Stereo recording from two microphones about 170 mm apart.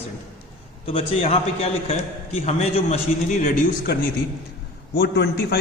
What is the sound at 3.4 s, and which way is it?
Speech, 55° left (ahead or behind).